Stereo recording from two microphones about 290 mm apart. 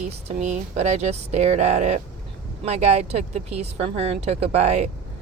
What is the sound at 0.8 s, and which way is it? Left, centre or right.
Speech, right.